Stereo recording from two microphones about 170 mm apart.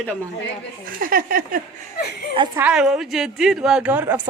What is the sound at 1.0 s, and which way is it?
Speech, 55° right (ahead or behind).